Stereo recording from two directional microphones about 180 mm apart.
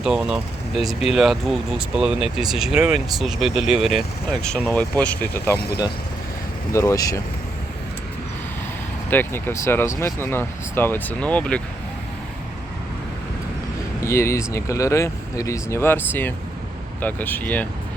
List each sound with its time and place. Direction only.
0.0 s speech: 5° right (ahead or behind)
6.7 s speech: 15° left (ahead or behind)
9.0 s speech: 10° left (ahead or behind)
14.0 s speech: 15° left (ahead or behind)